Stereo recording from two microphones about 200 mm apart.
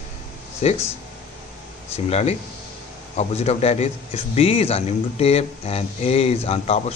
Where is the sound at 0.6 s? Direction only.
30° left (ahead or behind).